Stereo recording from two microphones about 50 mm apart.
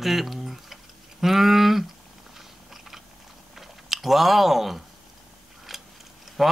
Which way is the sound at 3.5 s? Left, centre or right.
Centre.